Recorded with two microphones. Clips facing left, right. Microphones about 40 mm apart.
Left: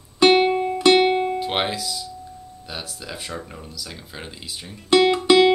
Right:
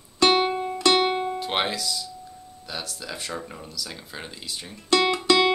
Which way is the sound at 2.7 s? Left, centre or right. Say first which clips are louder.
Even; centre.